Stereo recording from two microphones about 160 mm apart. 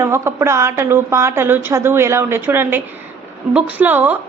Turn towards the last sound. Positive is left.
turn(degrees=-10)  # may be behind; listen again after turning